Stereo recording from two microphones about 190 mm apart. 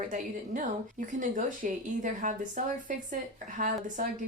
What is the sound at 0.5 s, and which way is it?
Speech, 45° right (ahead or behind).